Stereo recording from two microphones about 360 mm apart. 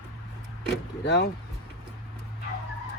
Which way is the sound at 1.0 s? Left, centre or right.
Left.